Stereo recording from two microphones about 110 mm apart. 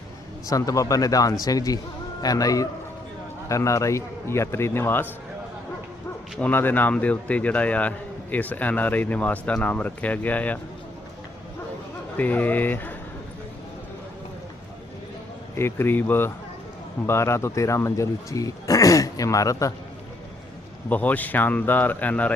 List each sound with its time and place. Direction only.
0.4 s a man's voice: 30° left (ahead or behind)
6.4 s a man's voice: 20° left (ahead or behind)
12.1 s a man's voice: 15° left (ahead or behind)
15.5 s speech: 20° left (ahead or behind)
20.9 s a man's voice: 15° left (ahead or behind)